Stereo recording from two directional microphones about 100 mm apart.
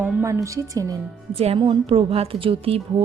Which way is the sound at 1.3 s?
75° right (ahead or behind).